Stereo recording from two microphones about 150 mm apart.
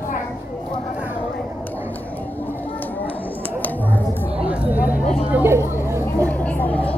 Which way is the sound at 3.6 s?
10° left (ahead or behind).